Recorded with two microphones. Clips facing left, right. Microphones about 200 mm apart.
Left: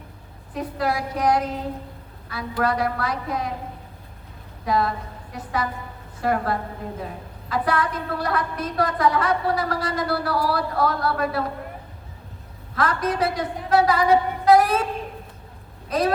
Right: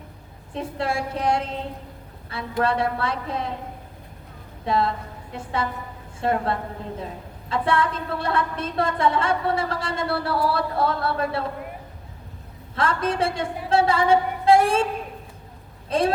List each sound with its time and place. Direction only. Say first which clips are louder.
0.5 s a woman's voice: left 1 dB; 25° right (ahead or behind)
4.6 s a woman's voice: even; 25° right (ahead or behind)
12.7 s a woman's voice: even; 25° right (ahead or behind)
15.9 s a woman's voice: even; 25° right (ahead or behind)